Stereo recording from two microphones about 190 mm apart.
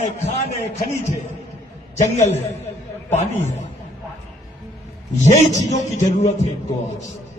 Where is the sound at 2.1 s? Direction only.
35° left (ahead or behind).